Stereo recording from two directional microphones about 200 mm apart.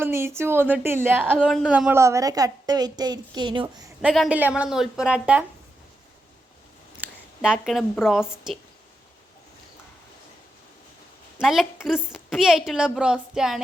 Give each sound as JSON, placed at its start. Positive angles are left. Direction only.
{"t": 0.0, "sound": "a woman's voice", "side_deg": -10}
{"t": 1.4, "sound": "a woman's voice", "side_deg": 0}
{"t": 4.0, "sound": "a woman's voice", "side_deg": 0}
{"t": 7.0, "sound": "speech", "side_deg": -5}
{"t": 11.3, "sound": "a woman's voice", "side_deg": 0}